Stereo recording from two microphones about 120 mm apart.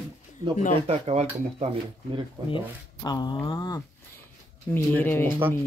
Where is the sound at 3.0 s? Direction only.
35° left (ahead or behind).